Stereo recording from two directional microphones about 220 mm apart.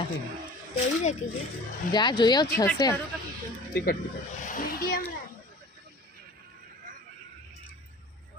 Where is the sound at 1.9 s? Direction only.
20° left (ahead or behind).